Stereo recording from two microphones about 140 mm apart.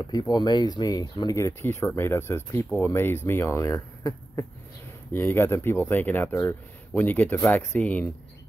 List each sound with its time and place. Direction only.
0.0 s speech: 30° left (ahead or behind); by 8.1 s 10° left (ahead or behind)